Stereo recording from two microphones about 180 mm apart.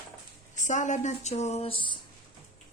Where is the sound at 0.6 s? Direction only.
45° left (ahead or behind).